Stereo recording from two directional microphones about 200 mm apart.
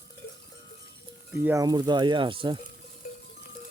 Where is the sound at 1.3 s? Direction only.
10° right (ahead or behind).